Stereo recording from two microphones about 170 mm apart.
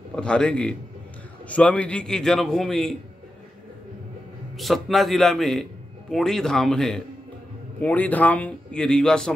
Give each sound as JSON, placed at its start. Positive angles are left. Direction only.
{"t": 0.1, "sound": "a man's voice", "side_deg": 5}
{"t": 4.6, "sound": "a man's voice", "side_deg": 0}